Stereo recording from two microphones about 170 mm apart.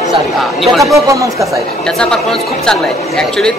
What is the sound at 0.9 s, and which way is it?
Speech, 20° right (ahead or behind).